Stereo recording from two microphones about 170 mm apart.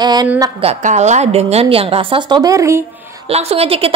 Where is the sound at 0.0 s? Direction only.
25° right (ahead or behind).